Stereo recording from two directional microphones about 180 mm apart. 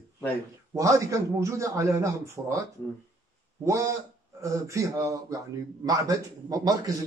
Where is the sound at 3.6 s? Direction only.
15° right (ahead or behind).